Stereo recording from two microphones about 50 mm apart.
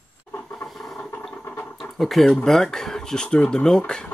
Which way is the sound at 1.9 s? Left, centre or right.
Centre.